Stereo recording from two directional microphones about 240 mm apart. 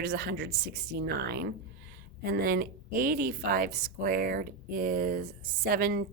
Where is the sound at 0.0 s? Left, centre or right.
Right.